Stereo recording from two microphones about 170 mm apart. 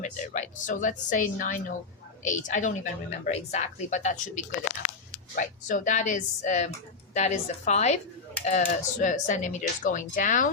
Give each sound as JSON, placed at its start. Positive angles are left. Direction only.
{"t": 0.0, "sound": "speech", "side_deg": 45}